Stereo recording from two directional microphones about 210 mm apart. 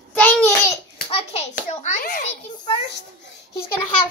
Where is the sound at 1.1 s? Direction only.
30° left (ahead or behind).